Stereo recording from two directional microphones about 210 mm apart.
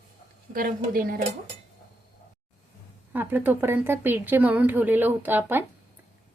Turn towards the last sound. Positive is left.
turn(degrees=-10)  # may be behind; listen again after turning